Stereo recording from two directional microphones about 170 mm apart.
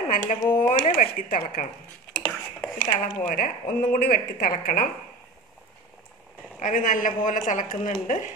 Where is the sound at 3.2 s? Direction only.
50° left (ahead or behind).